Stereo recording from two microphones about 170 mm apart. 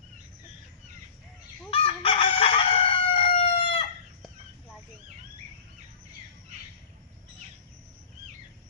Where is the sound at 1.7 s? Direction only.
30° left (ahead or behind).